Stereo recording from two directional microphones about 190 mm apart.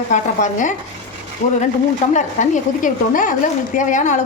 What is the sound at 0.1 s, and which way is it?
Speech, 40° left (ahead or behind).